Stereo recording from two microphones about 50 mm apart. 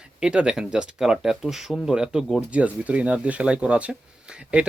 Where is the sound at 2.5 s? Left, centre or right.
Right.